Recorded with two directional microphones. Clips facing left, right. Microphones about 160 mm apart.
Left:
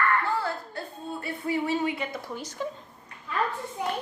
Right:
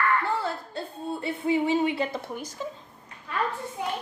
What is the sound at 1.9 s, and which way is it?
Speech, 30° right (ahead or behind).